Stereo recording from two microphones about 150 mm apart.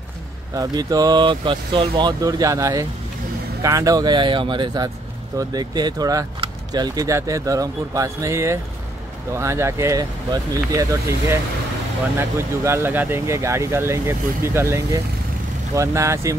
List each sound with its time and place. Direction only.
0.6 s speech: 25° right (ahead or behind)